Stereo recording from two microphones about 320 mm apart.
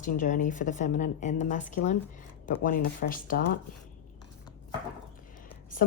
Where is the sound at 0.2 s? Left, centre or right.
Left.